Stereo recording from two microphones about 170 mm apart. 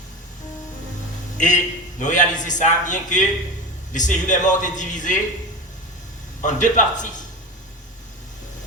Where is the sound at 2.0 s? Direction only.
45° left (ahead or behind).